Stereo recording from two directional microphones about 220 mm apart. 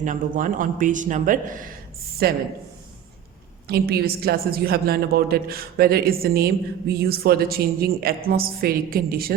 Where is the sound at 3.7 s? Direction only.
45° right (ahead or behind).